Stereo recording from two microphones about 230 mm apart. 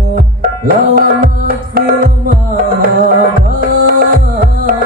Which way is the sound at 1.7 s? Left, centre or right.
Right.